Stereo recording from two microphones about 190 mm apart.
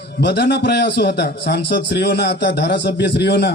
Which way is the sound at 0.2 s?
65° left (ahead or behind).